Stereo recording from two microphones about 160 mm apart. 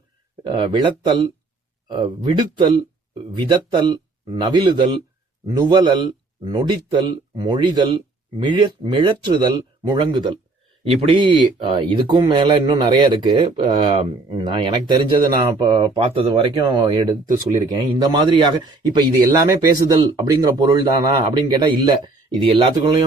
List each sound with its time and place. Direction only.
0.4 s a man's voice: 30° right (ahead or behind)